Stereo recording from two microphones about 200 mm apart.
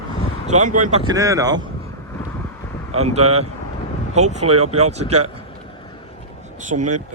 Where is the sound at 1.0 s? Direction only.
15° right (ahead or behind).